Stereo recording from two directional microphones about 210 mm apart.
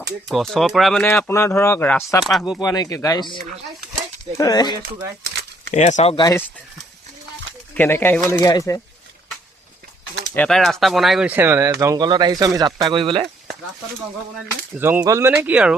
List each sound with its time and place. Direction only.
0.3 s speech: centre (ahead or behind)
2.2 s speech: centre (ahead or behind)
2.6 s speech: 15° left (ahead or behind)
4.4 s speech: 20° left (ahead or behind)
5.7 s speech: 35° left (ahead or behind)
7.7 s speech: 10° left (ahead or behind)
10.3 s speech: 5° left (ahead or behind); by 13.2 s 25° right (ahead or behind)
14.8 s speech: 10° right (ahead or behind)